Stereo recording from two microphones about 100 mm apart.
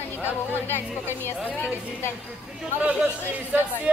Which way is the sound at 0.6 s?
20° left (ahead or behind).